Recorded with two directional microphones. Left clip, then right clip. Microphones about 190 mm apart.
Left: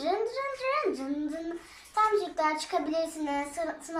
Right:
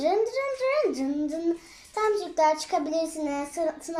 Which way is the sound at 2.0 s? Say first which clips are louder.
Right 2 dB; 30° right (ahead or behind).